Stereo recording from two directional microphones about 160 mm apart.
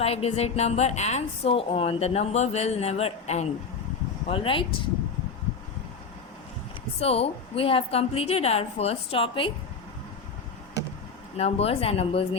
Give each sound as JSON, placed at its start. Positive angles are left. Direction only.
{"t": 0.0, "sound": "a woman's voice", "side_deg": 40}
{"t": 7.0, "sound": "a woman's voice", "side_deg": 40}
{"t": 11.3, "sound": "a woman's voice", "side_deg": 40}